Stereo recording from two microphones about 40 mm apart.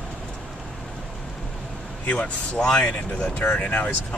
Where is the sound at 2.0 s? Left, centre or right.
Left.